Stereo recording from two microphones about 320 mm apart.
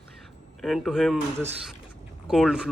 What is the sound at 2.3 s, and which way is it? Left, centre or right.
Speech, centre.